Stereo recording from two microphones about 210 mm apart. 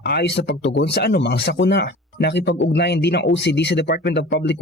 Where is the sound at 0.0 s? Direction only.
50° left (ahead or behind).